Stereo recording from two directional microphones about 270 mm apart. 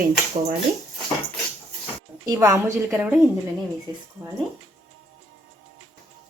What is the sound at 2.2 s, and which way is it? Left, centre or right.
Speech, centre.